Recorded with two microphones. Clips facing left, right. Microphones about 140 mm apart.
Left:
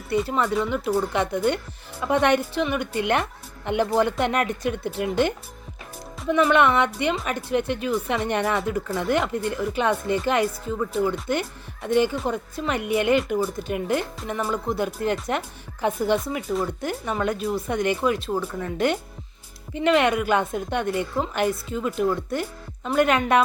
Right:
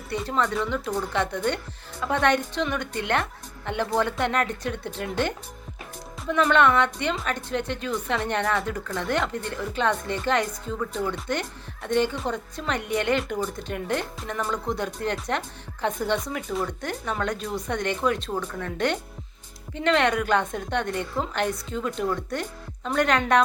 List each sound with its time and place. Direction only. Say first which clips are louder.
0.1 s a woman's voice: left 3 dB; 10° left (ahead or behind)